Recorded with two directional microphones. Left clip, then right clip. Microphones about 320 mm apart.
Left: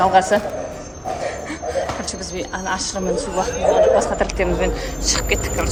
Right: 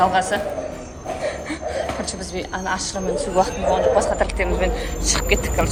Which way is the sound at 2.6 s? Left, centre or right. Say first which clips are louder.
Left 2 dB; centre.